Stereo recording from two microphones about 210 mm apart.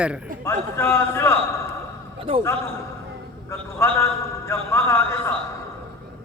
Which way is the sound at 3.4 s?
15° left (ahead or behind).